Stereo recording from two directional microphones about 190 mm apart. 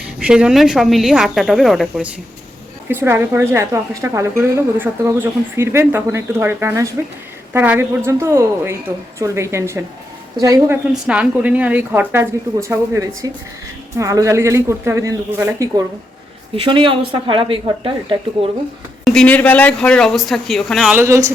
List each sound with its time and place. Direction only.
0.2 s speech: 5° right (ahead or behind)
2.9 s a woman's voice: 10° right (ahead or behind)
10.9 s a woman's voice: 5° right (ahead or behind); by 18.5 s 30° right (ahead or behind)
19.0 s speech: 5° left (ahead or behind)
21.0 s a woman's voice: 15° right (ahead or behind)